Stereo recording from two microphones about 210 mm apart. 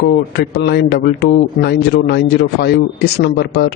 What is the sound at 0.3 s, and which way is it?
A man's voice, 50° left (ahead or behind).